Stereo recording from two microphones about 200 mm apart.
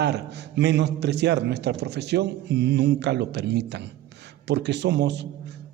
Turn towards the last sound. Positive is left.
turn(degrees=-60)  # may be behind; listen again after turning